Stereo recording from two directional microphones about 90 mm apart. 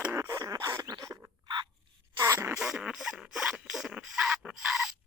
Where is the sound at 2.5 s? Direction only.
10° right (ahead or behind).